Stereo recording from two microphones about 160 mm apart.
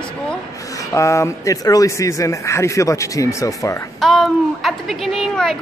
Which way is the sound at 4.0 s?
Centre (ahead or behind).